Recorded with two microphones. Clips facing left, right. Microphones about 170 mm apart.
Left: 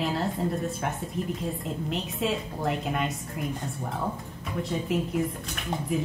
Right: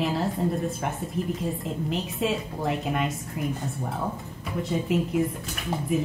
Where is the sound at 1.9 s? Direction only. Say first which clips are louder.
Right 2 dB; centre (ahead or behind).